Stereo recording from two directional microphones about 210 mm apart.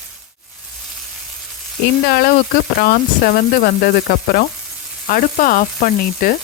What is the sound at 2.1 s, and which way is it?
Speech, 45° left (ahead or behind).